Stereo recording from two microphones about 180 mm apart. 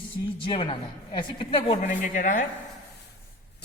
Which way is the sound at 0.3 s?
30° left (ahead or behind).